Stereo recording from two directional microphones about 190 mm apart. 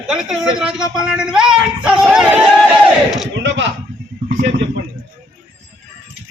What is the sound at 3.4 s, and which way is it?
Speech, 70° right (ahead or behind).